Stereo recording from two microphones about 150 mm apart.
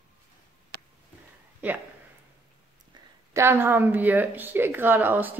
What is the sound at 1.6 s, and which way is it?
Speech, 10° right (ahead or behind).